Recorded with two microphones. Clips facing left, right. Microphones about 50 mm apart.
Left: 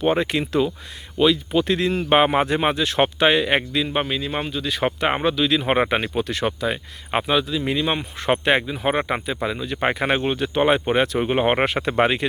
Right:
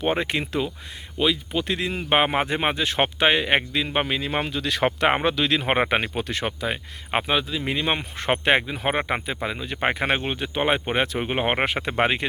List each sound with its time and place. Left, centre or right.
0.0 s speech: right
1.5 s speech: centre; by 3.8 s right
4.0 s speech: right
5.5 s speech: right
9.4 s speech: right
11.2 s speech: centre